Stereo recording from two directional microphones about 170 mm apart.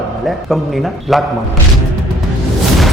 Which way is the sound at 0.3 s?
Centre (ahead or behind).